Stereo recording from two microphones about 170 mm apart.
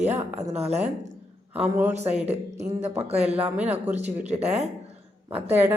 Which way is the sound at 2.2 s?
40° right (ahead or behind).